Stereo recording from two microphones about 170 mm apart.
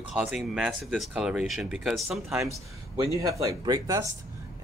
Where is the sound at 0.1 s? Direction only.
Centre (ahead or behind).